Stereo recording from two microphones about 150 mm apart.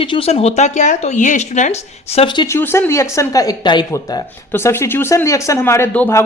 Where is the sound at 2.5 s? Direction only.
15° left (ahead or behind).